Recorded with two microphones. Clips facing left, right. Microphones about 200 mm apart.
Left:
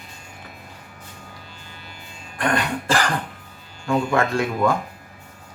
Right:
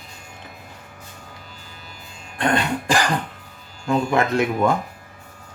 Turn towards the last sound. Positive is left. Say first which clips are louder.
# right 1 dB
turn(degrees=-20)  # may be behind; listen again after turning